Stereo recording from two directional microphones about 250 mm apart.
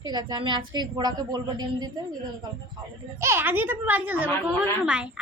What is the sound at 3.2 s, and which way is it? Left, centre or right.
A woman's voice, centre.